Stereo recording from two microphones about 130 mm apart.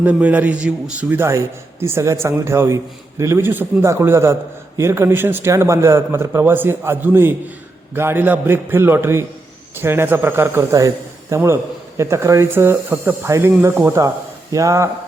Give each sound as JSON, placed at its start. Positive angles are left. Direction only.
{"t": 0.0, "sound": "a man's voice", "side_deg": -10}